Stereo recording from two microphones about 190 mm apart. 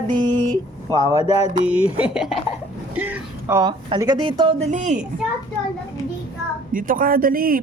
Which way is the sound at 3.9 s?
20° right (ahead or behind).